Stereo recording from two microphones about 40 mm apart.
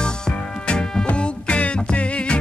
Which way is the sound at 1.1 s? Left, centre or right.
Left.